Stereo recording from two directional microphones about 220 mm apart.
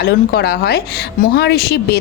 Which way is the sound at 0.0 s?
45° left (ahead or behind).